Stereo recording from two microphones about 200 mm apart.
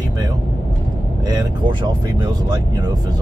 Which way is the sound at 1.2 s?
20° right (ahead or behind).